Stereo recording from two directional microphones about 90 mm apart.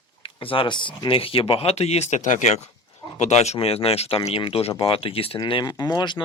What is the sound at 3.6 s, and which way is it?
Speech, 90° left.